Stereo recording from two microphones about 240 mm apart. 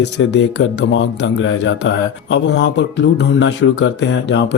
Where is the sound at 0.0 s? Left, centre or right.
Left.